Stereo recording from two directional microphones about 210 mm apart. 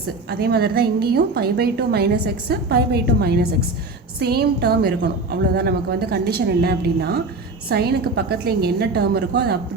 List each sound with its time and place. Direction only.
0.3 s a woman's voice: 50° right (ahead or behind)